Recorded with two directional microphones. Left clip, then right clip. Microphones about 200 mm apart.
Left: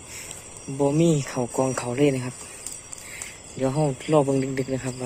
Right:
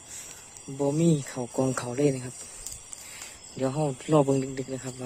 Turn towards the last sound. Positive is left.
turn(degrees=-20)  # may be behind; listen again after turning